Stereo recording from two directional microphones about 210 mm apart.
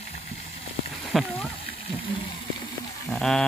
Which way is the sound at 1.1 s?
Centre (ahead or behind).